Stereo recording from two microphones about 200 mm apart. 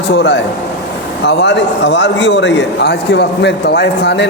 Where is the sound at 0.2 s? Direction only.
60° left (ahead or behind).